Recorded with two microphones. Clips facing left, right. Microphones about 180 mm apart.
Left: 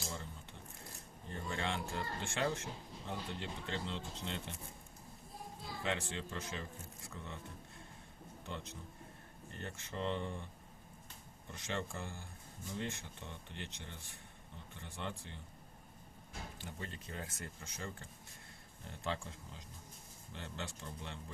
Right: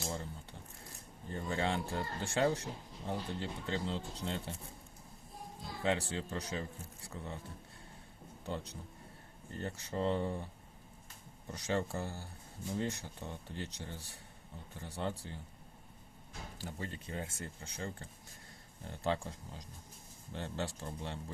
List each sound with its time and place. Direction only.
1.3 s speech: 35° right (ahead or behind)
5.8 s speech: 35° right (ahead or behind)
8.4 s speech: 35° right (ahead or behind)
11.5 s speech: 40° right (ahead or behind)
16.6 s speech: 30° right (ahead or behind)